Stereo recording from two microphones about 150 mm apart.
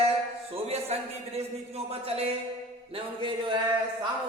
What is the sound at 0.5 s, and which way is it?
A man's voice, 45° right (ahead or behind).